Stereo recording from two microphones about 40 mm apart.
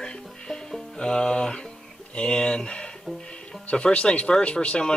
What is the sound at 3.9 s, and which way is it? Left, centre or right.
Speech, left.